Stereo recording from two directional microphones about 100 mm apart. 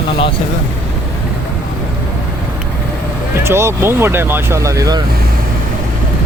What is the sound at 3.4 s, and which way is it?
Speech, 25° right (ahead or behind).